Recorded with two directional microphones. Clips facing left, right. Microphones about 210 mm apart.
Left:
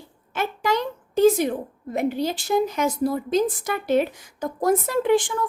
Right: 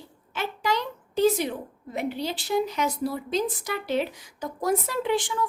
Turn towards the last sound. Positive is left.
turn(degrees=50)  # may be behind; listen again after turning